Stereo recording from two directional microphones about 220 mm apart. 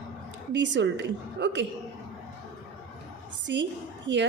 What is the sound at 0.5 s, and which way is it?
A woman's voice, 55° right (ahead or behind).